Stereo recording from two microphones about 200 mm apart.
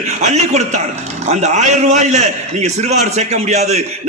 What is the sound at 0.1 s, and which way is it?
A man's voice, 35° right (ahead or behind).